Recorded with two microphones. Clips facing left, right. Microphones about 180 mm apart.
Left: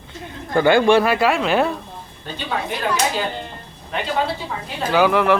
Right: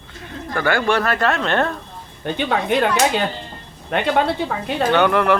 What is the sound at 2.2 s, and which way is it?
Speech, 65° right (ahead or behind).